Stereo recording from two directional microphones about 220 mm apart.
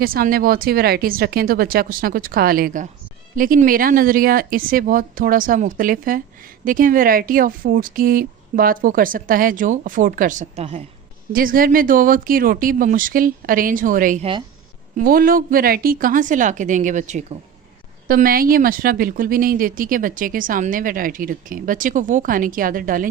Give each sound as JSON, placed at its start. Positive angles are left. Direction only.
{"t": 0.0, "sound": "a woman's voice", "side_deg": -40}
{"t": 11.3, "sound": "a woman's voice", "side_deg": -40}